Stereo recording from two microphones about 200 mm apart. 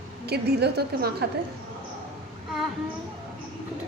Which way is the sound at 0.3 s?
55° right (ahead or behind).